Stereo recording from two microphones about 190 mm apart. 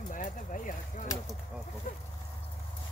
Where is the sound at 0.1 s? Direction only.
45° left (ahead or behind).